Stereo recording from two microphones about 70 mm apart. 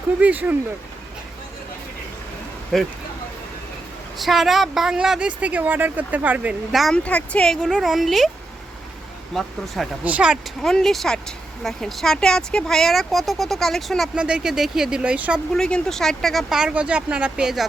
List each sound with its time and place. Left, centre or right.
0.2 s speech: right
2.7 s speech: centre
4.2 s speech: centre
5.4 s speech: right
6.7 s speech: centre
6.9 s speech: centre
7.6 s speech: centre
9.3 s speech: centre
10.0 s speech: centre
10.6 s speech: centre
14.2 s speech: centre
15.5 s speech: centre